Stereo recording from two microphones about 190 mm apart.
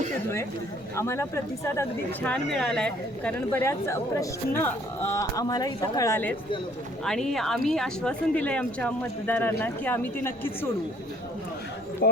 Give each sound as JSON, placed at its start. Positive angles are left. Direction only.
{"t": 0.9, "sound": "speech", "side_deg": 15}
{"t": 7.0, "sound": "speech", "side_deg": 5}